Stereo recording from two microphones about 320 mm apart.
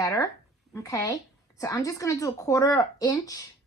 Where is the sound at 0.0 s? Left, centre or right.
Centre.